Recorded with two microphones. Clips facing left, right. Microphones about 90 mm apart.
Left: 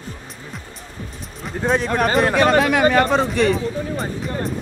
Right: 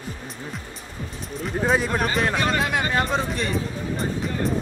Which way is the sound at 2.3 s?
65° left (ahead or behind).